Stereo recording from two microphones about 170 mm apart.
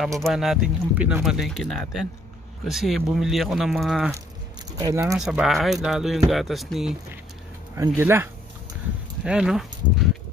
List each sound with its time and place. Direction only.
0.2 s speech: centre (ahead or behind)
4.7 s speech: 20° right (ahead or behind)
5.0 s speech: 5° right (ahead or behind)
7.7 s speech: 15° right (ahead or behind)